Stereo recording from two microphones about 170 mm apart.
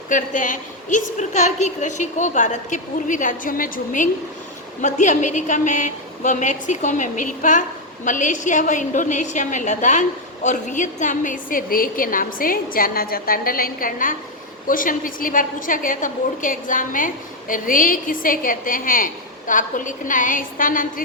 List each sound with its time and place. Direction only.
0.1 s a woman's voice: 50° left (ahead or behind)